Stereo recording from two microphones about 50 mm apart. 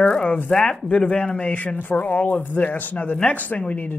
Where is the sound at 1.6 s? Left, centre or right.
Left.